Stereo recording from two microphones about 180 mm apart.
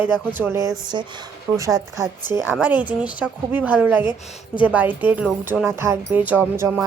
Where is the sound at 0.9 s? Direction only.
25° right (ahead or behind).